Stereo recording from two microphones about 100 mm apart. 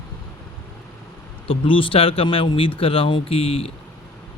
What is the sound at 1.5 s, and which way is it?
Speech, 60° left (ahead or behind).